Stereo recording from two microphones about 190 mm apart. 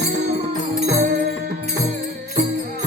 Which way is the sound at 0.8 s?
40° right (ahead or behind).